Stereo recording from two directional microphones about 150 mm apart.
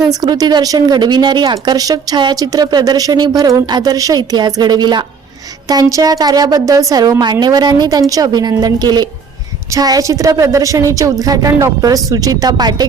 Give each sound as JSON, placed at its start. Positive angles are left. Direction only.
{"t": 0.1, "sound": "speech", "side_deg": -25}